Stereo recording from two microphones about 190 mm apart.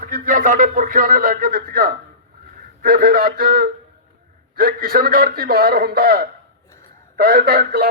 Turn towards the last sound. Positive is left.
turn(degrees=-55)  # may be behind; listen again after turning